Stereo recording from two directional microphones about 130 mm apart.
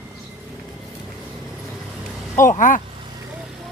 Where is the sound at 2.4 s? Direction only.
90° left.